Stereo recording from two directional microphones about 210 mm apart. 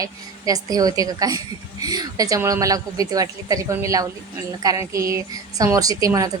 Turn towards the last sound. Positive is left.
turn(degrees=-15)  # may be behind; listen again after turning